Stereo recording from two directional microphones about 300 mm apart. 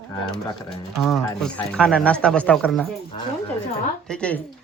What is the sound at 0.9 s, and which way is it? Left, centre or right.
Speech, centre.